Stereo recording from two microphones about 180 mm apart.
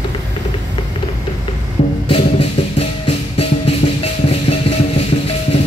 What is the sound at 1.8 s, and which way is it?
Music, 35° left (ahead or behind).